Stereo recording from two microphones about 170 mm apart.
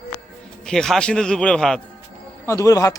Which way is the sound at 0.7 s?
5° left (ahead or behind).